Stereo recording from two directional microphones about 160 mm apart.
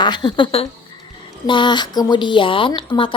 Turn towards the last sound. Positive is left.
turn(degrees=30)  # may be behind; listen again after turning